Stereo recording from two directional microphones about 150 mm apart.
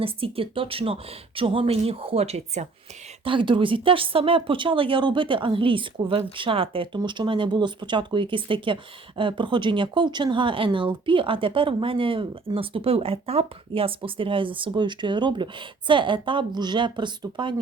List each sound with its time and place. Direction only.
0.0 s speech: 40° right (ahead or behind)
3.2 s speech: 35° right (ahead or behind)